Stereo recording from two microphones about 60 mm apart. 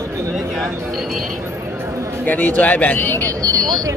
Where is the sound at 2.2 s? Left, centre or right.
Left.